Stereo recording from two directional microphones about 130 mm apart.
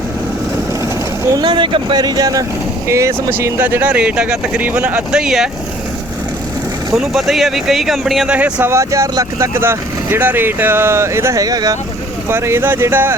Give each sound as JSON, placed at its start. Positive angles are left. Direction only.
{"t": 1.4, "sound": "speech", "side_deg": -40}
{"t": 6.9, "sound": "speech", "side_deg": 0}
{"t": 8.7, "sound": "speech", "side_deg": -25}